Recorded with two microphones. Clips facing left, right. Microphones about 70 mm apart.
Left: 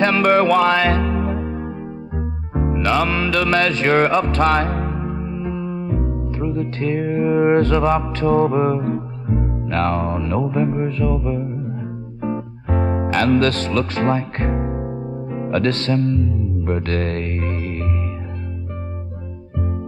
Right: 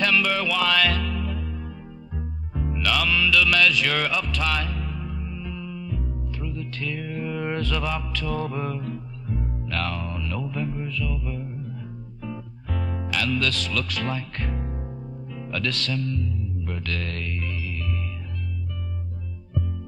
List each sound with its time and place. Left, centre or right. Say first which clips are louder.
0.0 s music: left 9 dB; left